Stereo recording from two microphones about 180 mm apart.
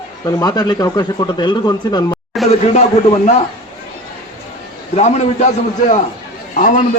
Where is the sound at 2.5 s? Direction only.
40° left (ahead or behind).